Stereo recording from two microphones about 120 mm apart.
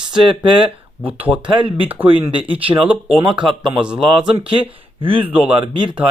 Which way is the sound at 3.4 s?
40° right (ahead or behind).